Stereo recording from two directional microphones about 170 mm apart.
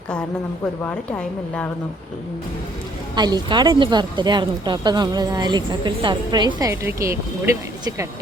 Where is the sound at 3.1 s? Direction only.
25° right (ahead or behind).